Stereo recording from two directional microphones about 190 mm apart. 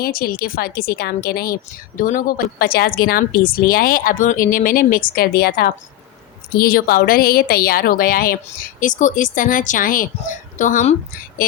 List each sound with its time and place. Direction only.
0.0 s speech: 50° left (ahead or behind)